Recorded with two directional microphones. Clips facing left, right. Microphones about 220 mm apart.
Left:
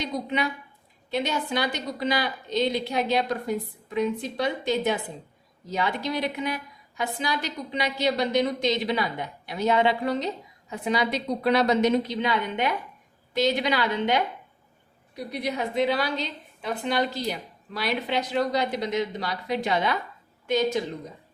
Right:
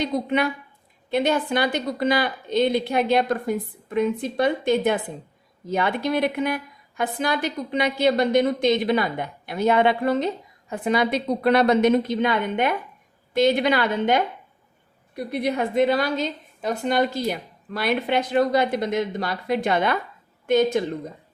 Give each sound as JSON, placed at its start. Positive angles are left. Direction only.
{"t": 0.0, "sound": "a woman's voice", "side_deg": -55}